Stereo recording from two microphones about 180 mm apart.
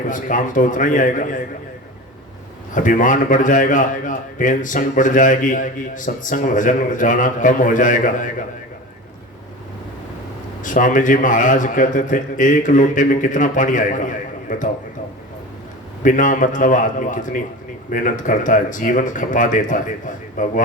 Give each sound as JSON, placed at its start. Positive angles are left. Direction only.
{"t": 0.1, "sound": "a man's voice", "side_deg": 45}
{"t": 2.7, "sound": "a man's voice", "side_deg": 45}
{"t": 10.6, "sound": "a man's voice", "side_deg": 45}
{"t": 16.0, "sound": "a man's voice", "side_deg": 45}